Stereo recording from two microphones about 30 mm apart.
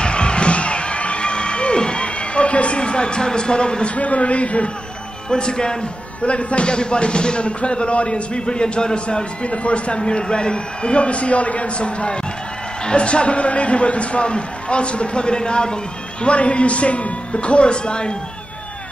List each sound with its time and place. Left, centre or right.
0.0 s music: left
3.9 s speech: left
5.3 s speech: left
6.2 s speech: left